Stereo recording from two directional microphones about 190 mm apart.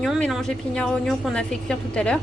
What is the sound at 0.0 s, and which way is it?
A woman's voice, centre (ahead or behind).